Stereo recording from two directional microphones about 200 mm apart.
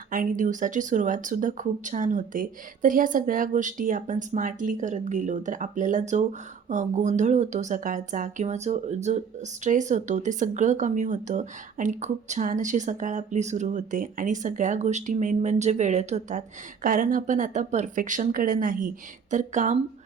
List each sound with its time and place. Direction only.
0.1 s speech: 40° right (ahead or behind)